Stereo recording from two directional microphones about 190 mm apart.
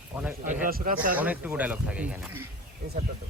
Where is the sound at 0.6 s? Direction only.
50° right (ahead or behind).